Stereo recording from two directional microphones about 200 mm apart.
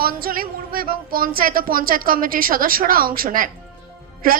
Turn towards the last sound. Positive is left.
turn(degrees=-45)  # may be behind; listen again after turning